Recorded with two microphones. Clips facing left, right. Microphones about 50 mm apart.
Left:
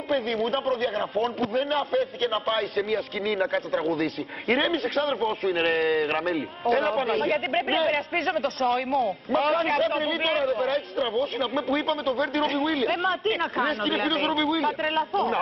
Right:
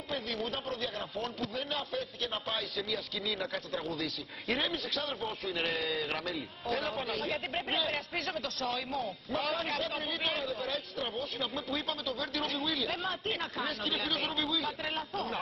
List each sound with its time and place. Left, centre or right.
0.1 s speech: left
6.3 s a man's voice: left
6.8 s speech: left